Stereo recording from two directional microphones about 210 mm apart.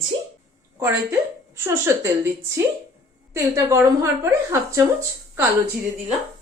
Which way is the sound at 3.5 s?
15° right (ahead or behind).